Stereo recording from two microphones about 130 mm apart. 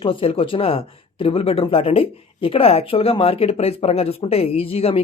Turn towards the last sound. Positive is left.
turn(degrees=50)  # may be behind; listen again after turning